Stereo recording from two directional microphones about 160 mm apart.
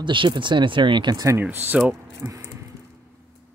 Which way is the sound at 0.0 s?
30° right (ahead or behind).